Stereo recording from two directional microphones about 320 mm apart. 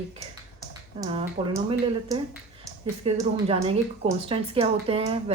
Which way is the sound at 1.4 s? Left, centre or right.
Centre.